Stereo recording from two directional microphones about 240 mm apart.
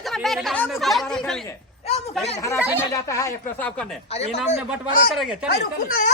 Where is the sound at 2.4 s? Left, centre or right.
Centre.